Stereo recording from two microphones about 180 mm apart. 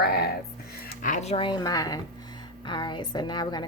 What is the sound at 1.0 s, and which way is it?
A woman's voice, 40° left (ahead or behind).